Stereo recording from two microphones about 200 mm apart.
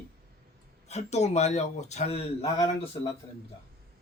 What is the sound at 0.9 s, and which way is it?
A man's voice, 35° left (ahead or behind).